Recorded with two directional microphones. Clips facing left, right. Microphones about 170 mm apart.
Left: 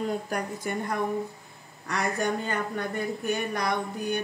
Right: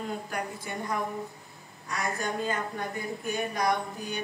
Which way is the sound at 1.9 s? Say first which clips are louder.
Left 4 dB; 70° left (ahead or behind).